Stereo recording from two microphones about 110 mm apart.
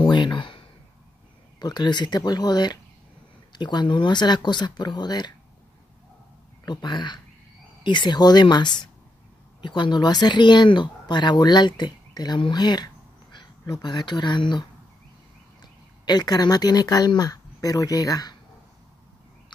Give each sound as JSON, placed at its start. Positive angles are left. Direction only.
{"t": 0.0, "sound": "a sound", "side_deg": 45}
{"t": 1.6, "sound": "speech", "side_deg": 40}
{"t": 6.6, "sound": "speech", "side_deg": 40}